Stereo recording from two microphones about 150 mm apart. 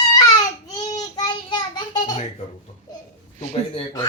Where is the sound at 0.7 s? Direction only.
30° left (ahead or behind).